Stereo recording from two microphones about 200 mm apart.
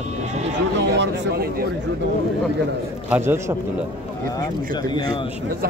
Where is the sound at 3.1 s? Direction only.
10° right (ahead or behind).